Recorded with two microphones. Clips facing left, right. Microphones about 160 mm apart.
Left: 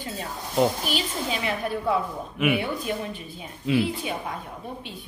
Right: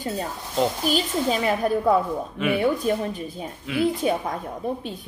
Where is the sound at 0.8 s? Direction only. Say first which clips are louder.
Right 6 dB; 40° right (ahead or behind).